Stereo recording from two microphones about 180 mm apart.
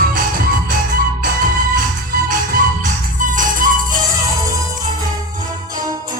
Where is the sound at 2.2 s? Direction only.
45° right (ahead or behind).